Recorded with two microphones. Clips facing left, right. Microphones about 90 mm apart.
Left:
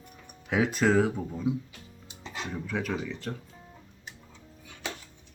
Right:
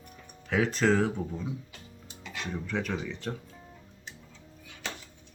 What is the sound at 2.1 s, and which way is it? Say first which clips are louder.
Music: left 2 dB; 25° left (ahead or behind).